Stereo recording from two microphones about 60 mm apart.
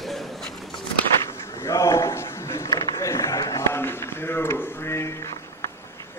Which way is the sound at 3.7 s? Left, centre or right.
Left.